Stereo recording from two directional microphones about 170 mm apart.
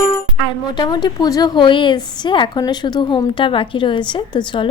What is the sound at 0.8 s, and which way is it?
A woman's voice, 25° left (ahead or behind).